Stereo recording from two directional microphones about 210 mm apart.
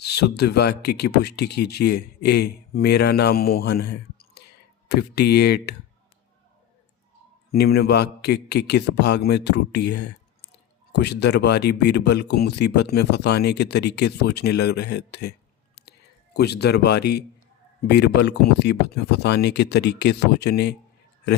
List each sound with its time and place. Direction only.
0.0 s speech: 50° left (ahead or behind)
7.5 s speech: 50° left (ahead or behind)